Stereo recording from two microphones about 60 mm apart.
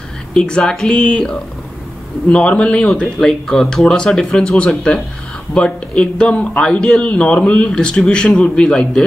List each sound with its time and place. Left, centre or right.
0.3 s speech: centre
3.2 s speech: centre